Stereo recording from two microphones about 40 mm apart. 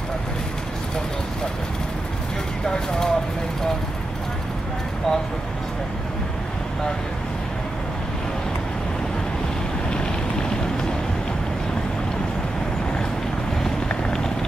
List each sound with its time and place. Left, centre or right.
2.6 s speech: centre